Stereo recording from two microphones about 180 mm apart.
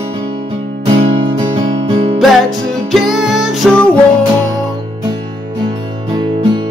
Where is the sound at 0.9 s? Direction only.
30° right (ahead or behind).